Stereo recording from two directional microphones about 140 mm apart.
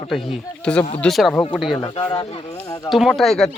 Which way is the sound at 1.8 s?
35° left (ahead or behind).